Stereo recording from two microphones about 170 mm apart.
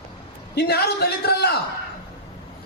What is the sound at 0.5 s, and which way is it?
Speech, 70° left (ahead or behind).